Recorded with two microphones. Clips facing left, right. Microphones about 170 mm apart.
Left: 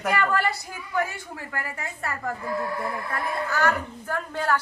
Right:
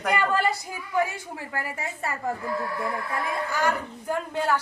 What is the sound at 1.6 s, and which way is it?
Speech, 20° right (ahead or behind).